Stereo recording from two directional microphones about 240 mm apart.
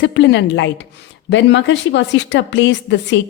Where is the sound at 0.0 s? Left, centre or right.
Left.